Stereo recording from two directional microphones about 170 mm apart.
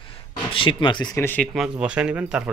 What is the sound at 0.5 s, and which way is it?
Speech, 30° left (ahead or behind).